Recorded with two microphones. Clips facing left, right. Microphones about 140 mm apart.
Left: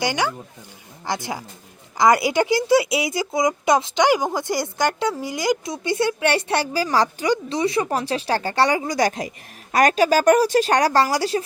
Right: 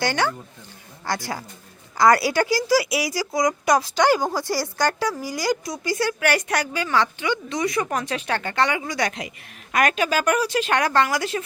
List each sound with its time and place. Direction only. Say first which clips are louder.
0.0 s speech: even; 15° left (ahead or behind); by 11.4 s 30° left (ahead or behind)